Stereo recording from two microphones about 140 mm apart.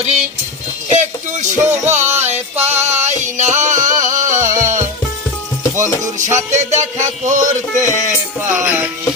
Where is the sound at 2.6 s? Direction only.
55° right (ahead or behind).